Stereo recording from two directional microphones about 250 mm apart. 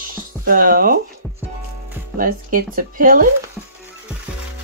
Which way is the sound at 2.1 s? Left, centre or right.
Right.